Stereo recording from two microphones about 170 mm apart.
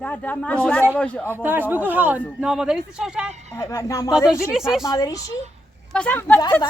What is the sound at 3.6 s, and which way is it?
Speech, 20° left (ahead or behind).